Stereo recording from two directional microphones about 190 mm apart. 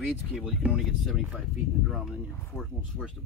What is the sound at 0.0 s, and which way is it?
Speech, 5° right (ahead or behind).